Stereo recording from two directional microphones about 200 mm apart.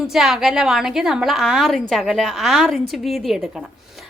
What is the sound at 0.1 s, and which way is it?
A woman's voice, 5° right (ahead or behind).